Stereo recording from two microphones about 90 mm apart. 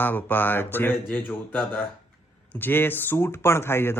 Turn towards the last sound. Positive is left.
turn(degrees=25)  # may be behind; listen again after turning